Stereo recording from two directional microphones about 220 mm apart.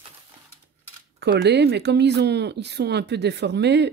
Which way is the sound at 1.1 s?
50° right (ahead or behind).